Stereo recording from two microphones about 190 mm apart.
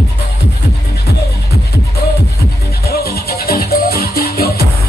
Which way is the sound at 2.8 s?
55° left (ahead or behind).